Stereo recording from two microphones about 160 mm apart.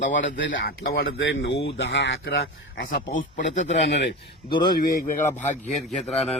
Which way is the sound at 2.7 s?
85° left.